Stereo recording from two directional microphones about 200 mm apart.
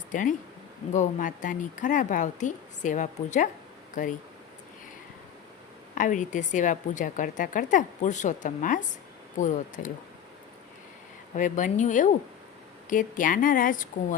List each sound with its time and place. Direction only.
0.1 s a woman's voice: 40° left (ahead or behind)
5.9 s a woman's voice: 40° left (ahead or behind)
11.3 s a woman's voice: 40° left (ahead or behind)